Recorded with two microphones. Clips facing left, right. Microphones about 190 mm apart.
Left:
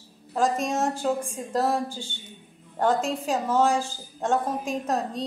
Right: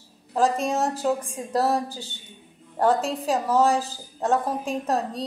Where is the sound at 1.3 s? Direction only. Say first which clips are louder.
Right 2 dB; 35° right (ahead or behind).